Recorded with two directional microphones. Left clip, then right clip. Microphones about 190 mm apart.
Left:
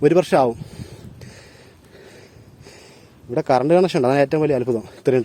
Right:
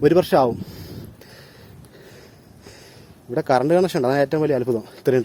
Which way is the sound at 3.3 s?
20° left (ahead or behind).